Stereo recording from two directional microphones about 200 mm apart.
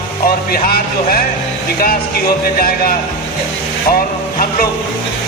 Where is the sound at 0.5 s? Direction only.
45° left (ahead or behind).